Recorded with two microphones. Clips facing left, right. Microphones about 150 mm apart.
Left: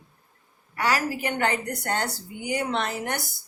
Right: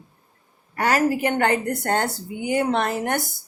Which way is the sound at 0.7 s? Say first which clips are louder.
Right 5 dB; 50° right (ahead or behind).